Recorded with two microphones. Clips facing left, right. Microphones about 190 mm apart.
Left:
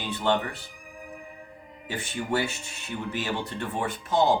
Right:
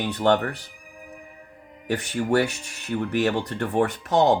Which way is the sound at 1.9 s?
70° right (ahead or behind).